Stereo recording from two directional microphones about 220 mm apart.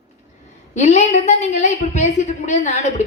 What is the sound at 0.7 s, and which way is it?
A woman's voice, 30° left (ahead or behind).